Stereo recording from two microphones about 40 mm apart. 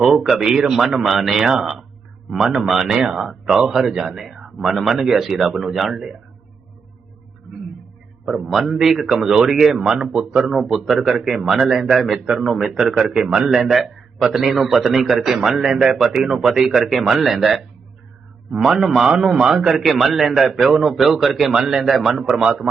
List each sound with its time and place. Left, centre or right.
0.0 s a man's voice: centre
8.2 s a man's voice: centre
10.4 s speech: centre
10.7 s a man's voice: centre
12.6 s a man's voice: centre
19.8 s a man's voice: centre
21.5 s a man's voice: centre